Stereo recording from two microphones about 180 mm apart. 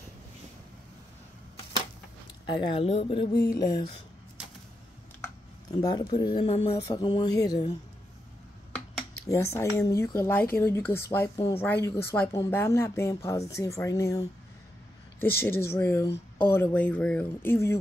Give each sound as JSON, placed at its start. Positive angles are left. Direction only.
{"t": 2.4, "sound": "speech", "side_deg": 25}
{"t": 5.7, "sound": "speech", "side_deg": 20}
{"t": 6.5, "sound": "a sound", "side_deg": 35}
{"t": 6.9, "sound": "speech", "side_deg": 25}
{"t": 9.3, "sound": "a woman's voice", "side_deg": 15}